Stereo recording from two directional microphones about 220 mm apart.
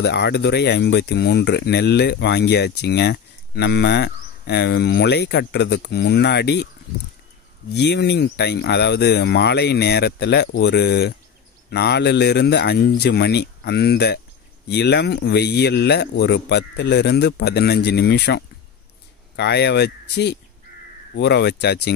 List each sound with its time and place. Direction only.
0.0 s speech: 50° left (ahead or behind)
7.7 s speech: 50° left (ahead or behind)